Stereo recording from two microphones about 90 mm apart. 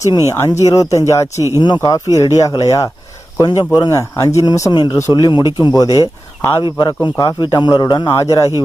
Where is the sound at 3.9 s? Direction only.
35° left (ahead or behind).